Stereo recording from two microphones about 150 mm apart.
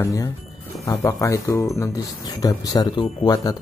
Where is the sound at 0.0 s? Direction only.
20° left (ahead or behind).